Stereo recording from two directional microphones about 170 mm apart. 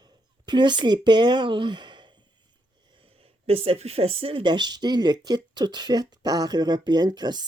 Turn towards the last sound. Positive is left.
turn(degrees=-25)  # may be behind; listen again after turning